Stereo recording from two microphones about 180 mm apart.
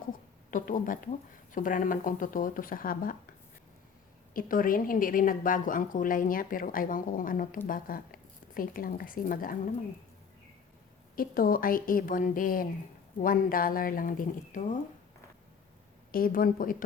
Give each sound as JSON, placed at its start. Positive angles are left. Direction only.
{"t": 0.5, "sound": "a woman's voice", "side_deg": 50}
{"t": 4.4, "sound": "a woman's voice", "side_deg": 50}
{"t": 11.1, "sound": "a woman's voice", "side_deg": 55}
{"t": 16.1, "sound": "a woman's voice", "side_deg": 50}